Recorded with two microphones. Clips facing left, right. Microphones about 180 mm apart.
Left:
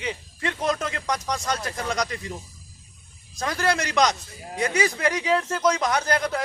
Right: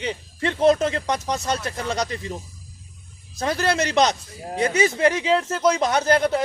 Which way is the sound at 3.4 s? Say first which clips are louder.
Right 3 dB; 30° right (ahead or behind).